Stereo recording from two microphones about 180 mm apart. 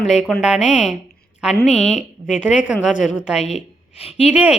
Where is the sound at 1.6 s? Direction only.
40° left (ahead or behind).